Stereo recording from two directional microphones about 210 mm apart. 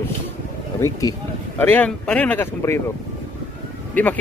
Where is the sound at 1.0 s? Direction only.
20° left (ahead or behind).